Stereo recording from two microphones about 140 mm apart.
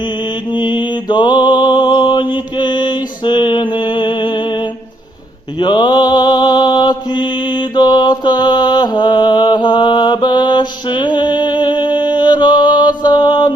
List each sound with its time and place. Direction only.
0.5 s mantra: 35° left (ahead or behind)
5.5 s mantra: 35° left (ahead or behind)